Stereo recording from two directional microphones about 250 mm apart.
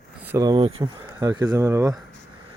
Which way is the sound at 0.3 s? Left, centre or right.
Centre.